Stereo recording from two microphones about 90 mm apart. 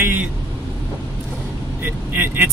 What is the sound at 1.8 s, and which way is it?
Speech, 25° right (ahead or behind).